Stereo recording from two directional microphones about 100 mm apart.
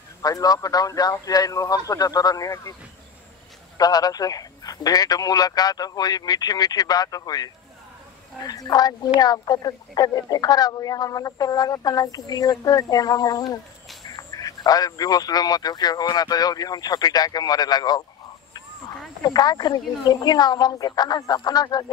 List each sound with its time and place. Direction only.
0.2 s speech: 40° left (ahead or behind)
3.7 s speech: 40° left (ahead or behind)
19.2 s speech: 40° left (ahead or behind)